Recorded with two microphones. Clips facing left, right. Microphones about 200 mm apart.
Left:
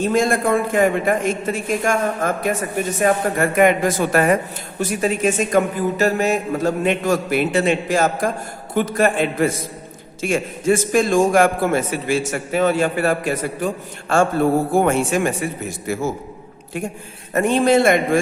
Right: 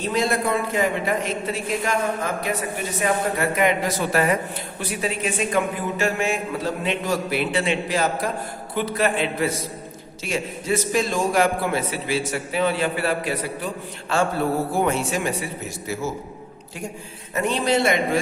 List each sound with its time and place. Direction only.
0.0 s a man's voice: 50° left (ahead or behind)
17.3 s a man's voice: 50° left (ahead or behind)